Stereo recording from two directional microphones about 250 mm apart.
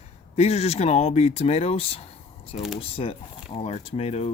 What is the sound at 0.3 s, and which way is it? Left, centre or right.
Speech, left.